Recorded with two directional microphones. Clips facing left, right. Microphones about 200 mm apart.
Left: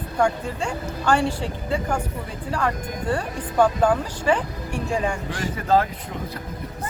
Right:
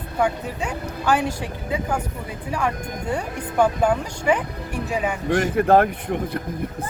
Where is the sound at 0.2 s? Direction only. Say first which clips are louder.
Left 1 dB; 5° right (ahead or behind).